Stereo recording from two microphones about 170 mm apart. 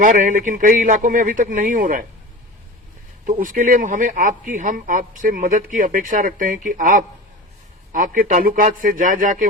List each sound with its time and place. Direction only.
0.0 s a man's voice: 50° right (ahead or behind)
3.2 s a man's voice: 55° right (ahead or behind)